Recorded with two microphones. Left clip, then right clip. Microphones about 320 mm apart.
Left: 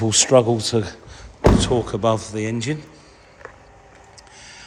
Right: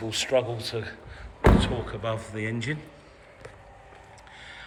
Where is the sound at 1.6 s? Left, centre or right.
Centre.